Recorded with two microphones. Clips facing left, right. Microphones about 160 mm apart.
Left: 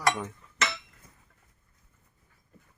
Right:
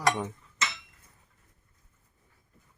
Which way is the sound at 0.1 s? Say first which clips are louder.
Right 1 dB; 15° right (ahead or behind).